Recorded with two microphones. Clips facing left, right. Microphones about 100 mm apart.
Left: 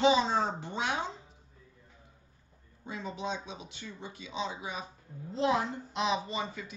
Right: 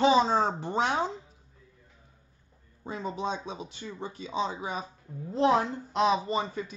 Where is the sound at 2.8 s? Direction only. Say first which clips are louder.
Right 4 dB; 40° right (ahead or behind).